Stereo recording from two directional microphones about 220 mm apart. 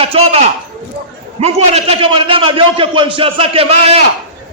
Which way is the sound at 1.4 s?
25° right (ahead or behind).